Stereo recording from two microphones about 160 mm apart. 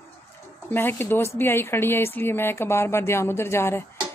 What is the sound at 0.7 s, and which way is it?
Speech, 10° left (ahead or behind).